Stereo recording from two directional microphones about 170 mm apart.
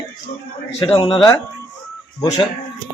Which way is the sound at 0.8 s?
30° left (ahead or behind).